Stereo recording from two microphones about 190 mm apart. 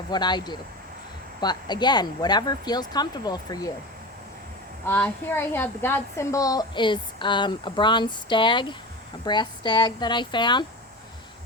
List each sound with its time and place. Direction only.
0.1 s a woman's voice: 20° left (ahead or behind)
4.9 s a woman's voice: 10° left (ahead or behind)